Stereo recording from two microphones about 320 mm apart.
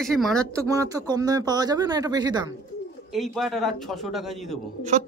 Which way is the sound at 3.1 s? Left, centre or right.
Centre.